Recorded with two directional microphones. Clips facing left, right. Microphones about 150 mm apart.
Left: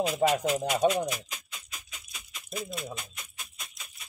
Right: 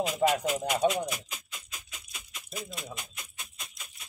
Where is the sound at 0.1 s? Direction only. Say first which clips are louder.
Left 1 dB; centre (ahead or behind).